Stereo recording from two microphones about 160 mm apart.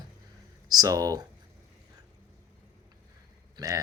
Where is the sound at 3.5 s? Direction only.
20° right (ahead or behind).